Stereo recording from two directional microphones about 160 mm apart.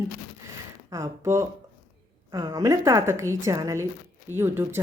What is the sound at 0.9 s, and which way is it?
Speech, 20° right (ahead or behind).